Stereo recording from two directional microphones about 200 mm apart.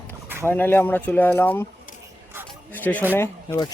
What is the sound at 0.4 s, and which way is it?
Speech, 10° left (ahead or behind).